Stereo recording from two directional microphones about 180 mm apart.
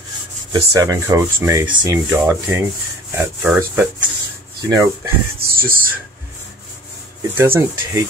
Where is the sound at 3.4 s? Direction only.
5° right (ahead or behind).